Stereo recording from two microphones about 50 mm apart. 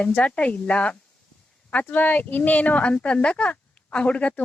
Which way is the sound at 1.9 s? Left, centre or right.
Left.